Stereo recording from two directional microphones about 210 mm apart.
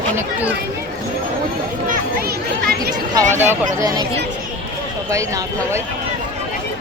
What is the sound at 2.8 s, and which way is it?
Speech, 20° right (ahead or behind).